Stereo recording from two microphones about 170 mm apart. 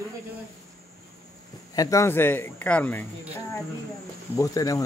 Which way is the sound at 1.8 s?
20° left (ahead or behind).